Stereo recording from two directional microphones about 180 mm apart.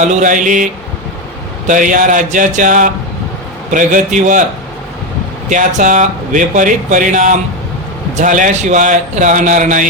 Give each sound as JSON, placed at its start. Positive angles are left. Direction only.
{"t": 0.0, "sound": "speech", "side_deg": -45}
{"t": 5.5, "sound": "speech", "side_deg": -45}